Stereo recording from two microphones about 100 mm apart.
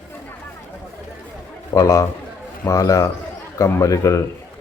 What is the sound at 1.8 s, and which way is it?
A man's voice, 30° left (ahead or behind).